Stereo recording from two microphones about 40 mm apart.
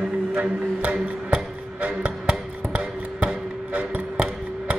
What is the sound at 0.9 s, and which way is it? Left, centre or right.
Music, right.